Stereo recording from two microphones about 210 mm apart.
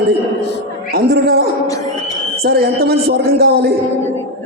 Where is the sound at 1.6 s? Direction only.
15° left (ahead or behind).